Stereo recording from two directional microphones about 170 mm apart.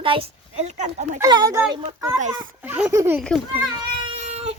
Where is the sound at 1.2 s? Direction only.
20° right (ahead or behind).